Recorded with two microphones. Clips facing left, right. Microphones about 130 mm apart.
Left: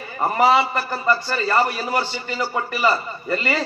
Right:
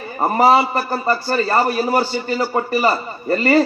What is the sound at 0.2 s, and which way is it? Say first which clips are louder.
A man's voice: right 3 dB; 35° right (ahead or behind).